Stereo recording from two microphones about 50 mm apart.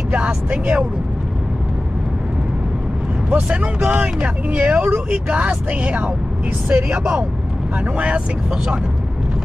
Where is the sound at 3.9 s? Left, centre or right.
Right.